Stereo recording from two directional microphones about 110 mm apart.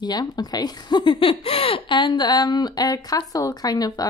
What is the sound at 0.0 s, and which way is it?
A woman's voice, 40° left (ahead or behind).